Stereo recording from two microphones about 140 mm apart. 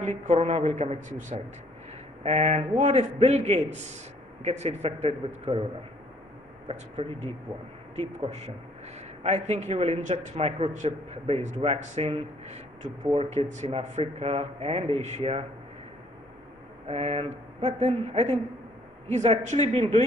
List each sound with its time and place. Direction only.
0.0 s a woman's voice: 60° right (ahead or behind)
2.2 s a man's voice: 50° right (ahead or behind)
7.0 s a man's voice: 45° right (ahead or behind)
16.8 s a sound: 45° right (ahead or behind)
17.7 s a man's voice: 55° right (ahead or behind)